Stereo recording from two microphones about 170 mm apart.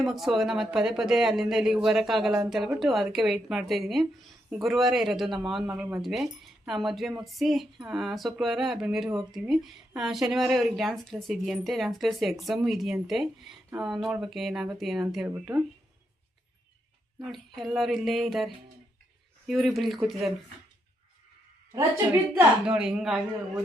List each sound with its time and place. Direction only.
0.0 s speech: centre (ahead or behind)
17.3 s speech: centre (ahead or behind)
22.4 s speech: 5° right (ahead or behind)